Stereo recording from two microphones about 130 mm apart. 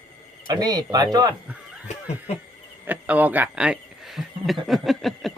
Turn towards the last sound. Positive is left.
turn(degrees=0)  # may be behind; listen again after turning